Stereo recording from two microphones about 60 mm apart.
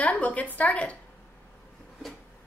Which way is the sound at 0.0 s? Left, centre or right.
Left.